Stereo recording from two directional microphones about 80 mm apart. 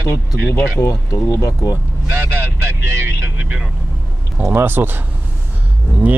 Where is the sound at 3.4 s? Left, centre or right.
Centre.